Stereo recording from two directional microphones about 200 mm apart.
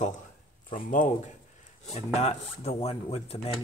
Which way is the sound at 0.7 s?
40° left (ahead or behind).